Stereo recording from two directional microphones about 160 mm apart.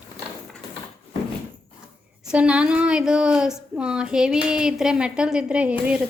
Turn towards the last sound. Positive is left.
turn(degrees=-10)  # may be behind; listen again after turning